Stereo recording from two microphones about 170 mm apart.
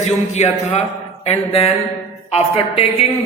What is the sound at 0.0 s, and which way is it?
Speech, 40° left (ahead or behind).